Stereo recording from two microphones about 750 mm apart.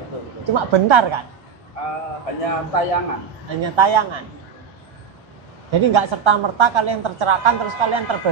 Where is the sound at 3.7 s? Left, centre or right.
Right.